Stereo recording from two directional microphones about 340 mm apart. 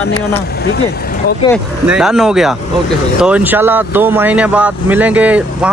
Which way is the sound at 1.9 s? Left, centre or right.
Centre.